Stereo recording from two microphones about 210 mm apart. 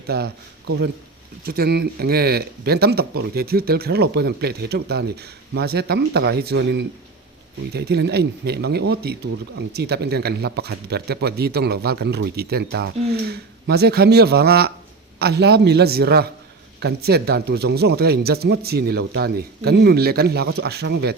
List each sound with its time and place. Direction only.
1.5 s a man's voice: 50° right (ahead or behind)